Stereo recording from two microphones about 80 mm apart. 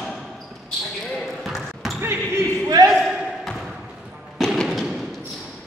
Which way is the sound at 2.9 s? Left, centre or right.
Centre.